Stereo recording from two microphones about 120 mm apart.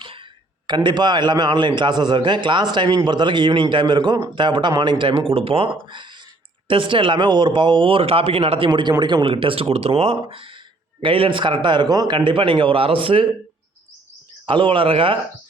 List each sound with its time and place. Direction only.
0.0 s a sound: 45° right (ahead or behind)
0.7 s a man's voice: 40° right (ahead or behind)
14.4 s speech: 45° right (ahead or behind)